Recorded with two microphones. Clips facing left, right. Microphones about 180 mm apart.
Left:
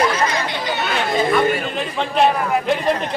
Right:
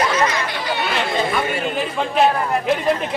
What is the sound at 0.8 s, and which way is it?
Speech, centre (ahead or behind).